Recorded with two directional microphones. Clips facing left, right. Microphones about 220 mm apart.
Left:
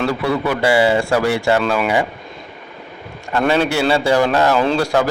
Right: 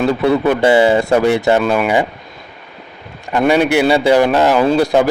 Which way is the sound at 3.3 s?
15° right (ahead or behind).